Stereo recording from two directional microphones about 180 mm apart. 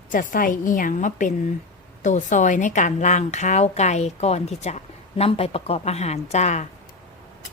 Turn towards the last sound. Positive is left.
turn(degrees=40)  # may be behind; listen again after turning